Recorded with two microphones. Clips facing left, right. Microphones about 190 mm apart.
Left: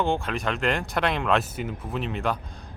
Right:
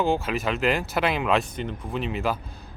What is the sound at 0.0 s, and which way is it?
Speech, 5° right (ahead or behind).